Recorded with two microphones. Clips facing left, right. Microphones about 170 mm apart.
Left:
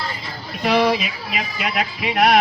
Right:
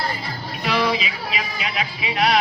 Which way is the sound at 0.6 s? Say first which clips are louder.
Left 4 dB; 50° left (ahead or behind).